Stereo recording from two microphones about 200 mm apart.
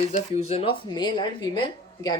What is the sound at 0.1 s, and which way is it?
Speech, 30° left (ahead or behind).